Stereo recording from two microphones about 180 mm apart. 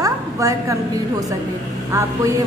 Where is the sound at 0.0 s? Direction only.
15° right (ahead or behind).